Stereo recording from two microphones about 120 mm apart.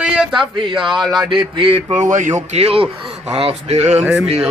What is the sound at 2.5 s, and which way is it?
A man's voice, 55° right (ahead or behind).